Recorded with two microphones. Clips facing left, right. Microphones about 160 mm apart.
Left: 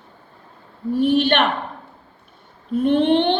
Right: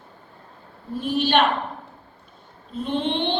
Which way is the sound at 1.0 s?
60° left (ahead or behind).